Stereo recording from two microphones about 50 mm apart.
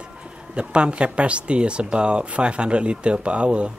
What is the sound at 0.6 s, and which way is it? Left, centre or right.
Speech, right.